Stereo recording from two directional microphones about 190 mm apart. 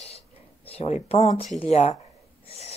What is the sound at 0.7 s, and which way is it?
Speech, 35° left (ahead or behind).